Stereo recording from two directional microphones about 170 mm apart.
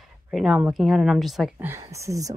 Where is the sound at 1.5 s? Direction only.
10° right (ahead or behind).